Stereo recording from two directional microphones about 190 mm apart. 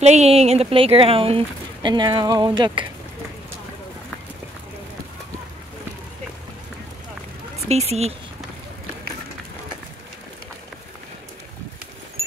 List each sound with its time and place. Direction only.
0.0 s speech: 35° right (ahead or behind)
7.6 s speech: 35° right (ahead or behind)